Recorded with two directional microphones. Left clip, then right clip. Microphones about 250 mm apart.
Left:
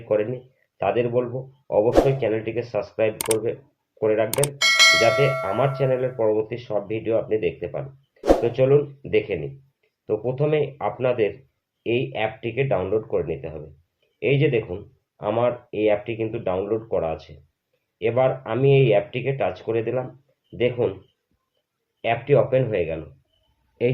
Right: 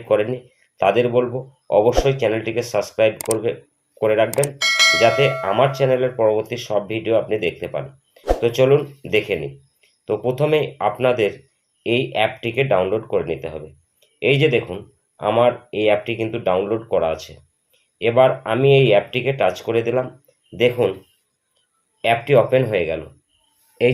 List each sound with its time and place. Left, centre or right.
0.1 s speech: right
3.3 s speech: right
4.3 s speech: centre
5.7 s speech: right
22.0 s speech: right